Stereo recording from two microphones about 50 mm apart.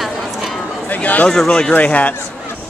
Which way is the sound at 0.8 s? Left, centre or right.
Left.